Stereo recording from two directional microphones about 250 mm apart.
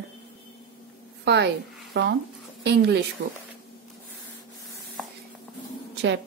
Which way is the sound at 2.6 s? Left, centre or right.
Right.